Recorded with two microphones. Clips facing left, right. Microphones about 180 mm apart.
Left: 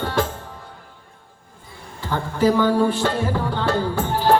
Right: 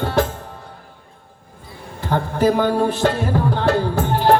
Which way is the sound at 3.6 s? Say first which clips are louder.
Right 3 dB; 40° right (ahead or behind).